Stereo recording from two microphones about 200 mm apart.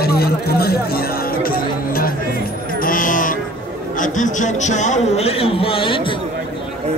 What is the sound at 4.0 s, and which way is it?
A man's voice, 40° left (ahead or behind).